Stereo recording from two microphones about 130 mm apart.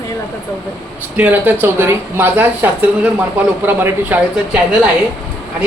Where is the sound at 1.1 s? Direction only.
15° right (ahead or behind).